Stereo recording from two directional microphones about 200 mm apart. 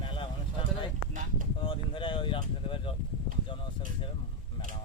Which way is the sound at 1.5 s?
25° left (ahead or behind).